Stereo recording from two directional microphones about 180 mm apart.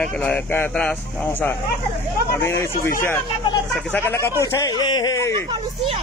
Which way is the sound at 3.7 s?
5° left (ahead or behind).